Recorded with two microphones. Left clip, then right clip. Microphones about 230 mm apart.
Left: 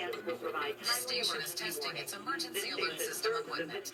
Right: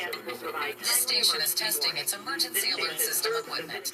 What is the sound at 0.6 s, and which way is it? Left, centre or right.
A woman's voice, right.